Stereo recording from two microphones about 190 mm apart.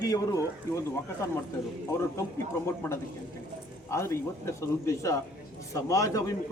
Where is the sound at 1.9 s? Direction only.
15° left (ahead or behind).